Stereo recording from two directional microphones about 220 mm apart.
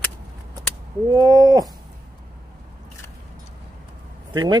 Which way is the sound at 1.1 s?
15° right (ahead or behind).